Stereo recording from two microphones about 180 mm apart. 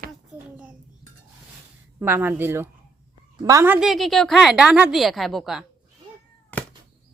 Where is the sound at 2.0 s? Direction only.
10° right (ahead or behind).